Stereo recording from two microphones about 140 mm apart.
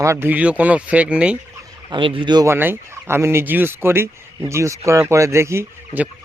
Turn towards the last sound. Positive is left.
turn(degrees=-20)  # may be behind; listen again after turning